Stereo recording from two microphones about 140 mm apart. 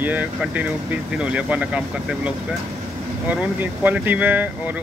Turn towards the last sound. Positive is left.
turn(degrees=-10)  # may be behind; listen again after turning